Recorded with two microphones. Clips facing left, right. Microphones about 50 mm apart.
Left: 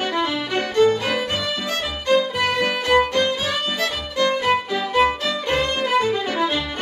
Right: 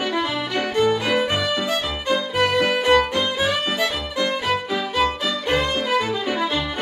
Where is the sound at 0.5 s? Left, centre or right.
Centre.